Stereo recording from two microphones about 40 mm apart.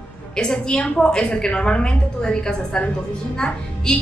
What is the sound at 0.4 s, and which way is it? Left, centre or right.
A woman's voice, left.